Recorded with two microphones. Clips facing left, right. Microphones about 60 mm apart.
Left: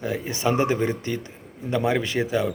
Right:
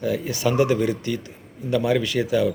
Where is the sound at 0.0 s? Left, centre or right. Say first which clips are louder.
Right 2 dB; left.